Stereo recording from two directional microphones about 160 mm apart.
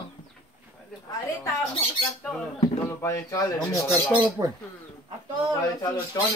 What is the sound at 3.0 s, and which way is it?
Speech, 20° left (ahead or behind).